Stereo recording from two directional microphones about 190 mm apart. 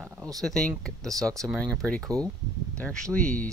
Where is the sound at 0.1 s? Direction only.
20° right (ahead or behind).